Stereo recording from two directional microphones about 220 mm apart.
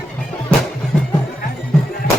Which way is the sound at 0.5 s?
5° left (ahead or behind).